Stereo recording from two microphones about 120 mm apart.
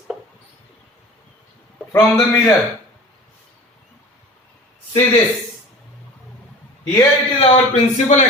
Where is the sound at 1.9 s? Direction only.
20° left (ahead or behind).